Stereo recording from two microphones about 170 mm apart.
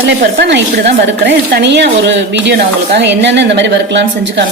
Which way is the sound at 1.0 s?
90° right.